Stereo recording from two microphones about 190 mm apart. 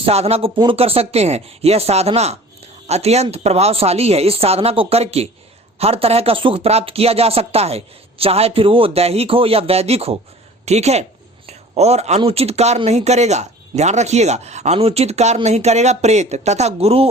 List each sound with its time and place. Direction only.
0.0 s speech: 35° right (ahead or behind)